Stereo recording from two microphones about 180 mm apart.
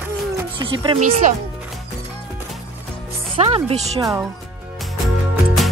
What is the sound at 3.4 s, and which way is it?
Speech, 35° right (ahead or behind).